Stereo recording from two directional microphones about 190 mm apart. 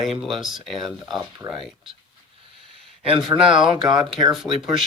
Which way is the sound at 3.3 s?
20° right (ahead or behind).